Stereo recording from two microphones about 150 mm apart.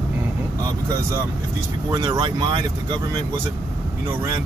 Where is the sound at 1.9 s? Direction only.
25° right (ahead or behind).